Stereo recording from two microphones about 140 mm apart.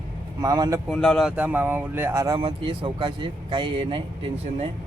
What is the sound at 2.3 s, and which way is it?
Speech, 40° right (ahead or behind).